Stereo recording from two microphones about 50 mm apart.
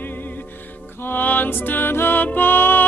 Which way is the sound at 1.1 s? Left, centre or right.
Left.